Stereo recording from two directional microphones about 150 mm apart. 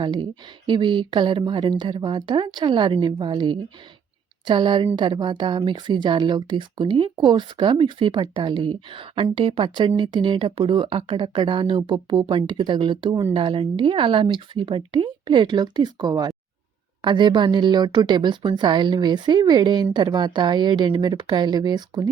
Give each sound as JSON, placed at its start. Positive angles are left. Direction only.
{"t": 0.0, "sound": "a woman's voice", "side_deg": -30}